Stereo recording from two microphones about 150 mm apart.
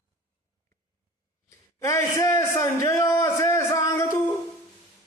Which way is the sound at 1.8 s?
20° left (ahead or behind).